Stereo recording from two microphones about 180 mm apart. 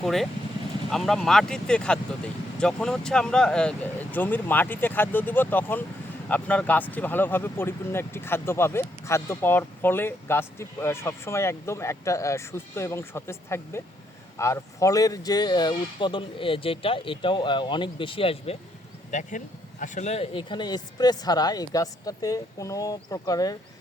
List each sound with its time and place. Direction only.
0.0 s speech: centre (ahead or behind); by 18.5 s 30° left (ahead or behind)
19.1 s speech: 45° left (ahead or behind); by 23.6 s 20° left (ahead or behind)